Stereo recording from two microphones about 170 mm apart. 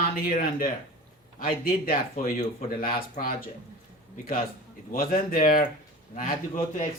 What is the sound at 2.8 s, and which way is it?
A man's voice, 55° left (ahead or behind).